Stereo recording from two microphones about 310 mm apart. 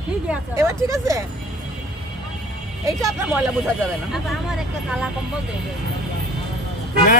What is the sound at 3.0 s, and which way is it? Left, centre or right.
Speech, centre.